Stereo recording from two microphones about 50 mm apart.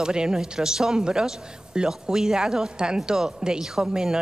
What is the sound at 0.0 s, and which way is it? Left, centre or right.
A woman's voice, centre.